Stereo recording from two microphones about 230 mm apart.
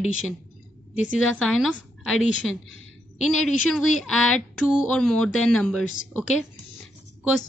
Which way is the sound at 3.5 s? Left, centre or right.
Centre.